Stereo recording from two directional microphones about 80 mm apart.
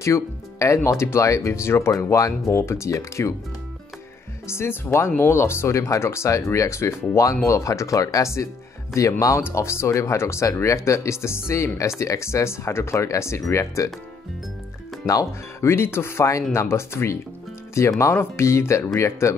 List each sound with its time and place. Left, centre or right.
0.0 s speech: left
4.5 s speech: left
15.6 s speech: left